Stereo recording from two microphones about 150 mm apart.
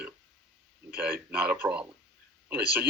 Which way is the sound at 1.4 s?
10° right (ahead or behind).